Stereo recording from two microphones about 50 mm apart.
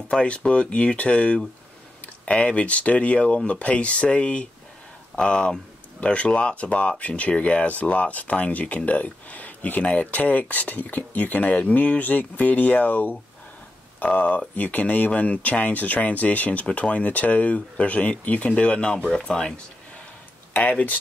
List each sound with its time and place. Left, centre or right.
0.1 s speech: left